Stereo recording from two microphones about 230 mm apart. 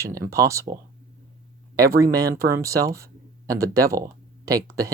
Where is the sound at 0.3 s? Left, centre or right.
Centre.